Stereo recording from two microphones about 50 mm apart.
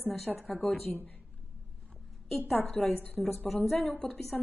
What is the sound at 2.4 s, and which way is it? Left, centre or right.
Speech, left.